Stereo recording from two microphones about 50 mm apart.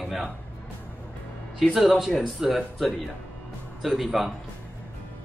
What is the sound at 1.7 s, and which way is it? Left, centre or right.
Speech, centre.